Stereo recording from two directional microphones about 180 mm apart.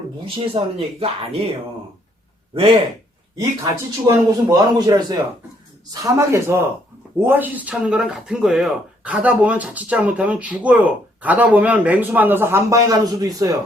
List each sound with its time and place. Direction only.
0.3 s speech: 30° right (ahead or behind)
3.3 s a man's voice: 20° right (ahead or behind)